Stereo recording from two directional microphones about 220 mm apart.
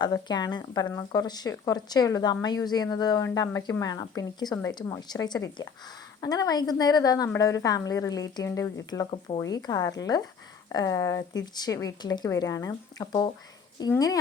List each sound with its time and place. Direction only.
0.0 s speech: 20° left (ahead or behind)